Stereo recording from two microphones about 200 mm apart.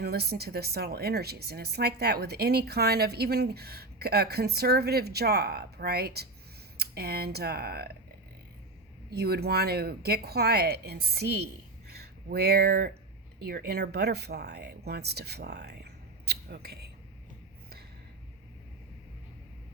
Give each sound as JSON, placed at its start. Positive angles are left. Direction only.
{"t": 0.0, "sound": "speech", "side_deg": -55}
{"t": 9.0, "sound": "speech", "side_deg": -50}